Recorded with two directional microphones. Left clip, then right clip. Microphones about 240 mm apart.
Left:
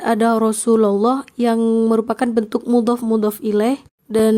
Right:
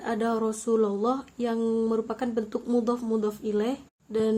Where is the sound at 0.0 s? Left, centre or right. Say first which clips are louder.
Left 11 dB; left.